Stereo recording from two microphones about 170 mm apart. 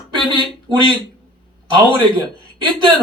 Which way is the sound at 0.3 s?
30° right (ahead or behind).